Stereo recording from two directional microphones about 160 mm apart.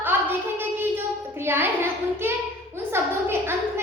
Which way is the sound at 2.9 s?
15° right (ahead or behind).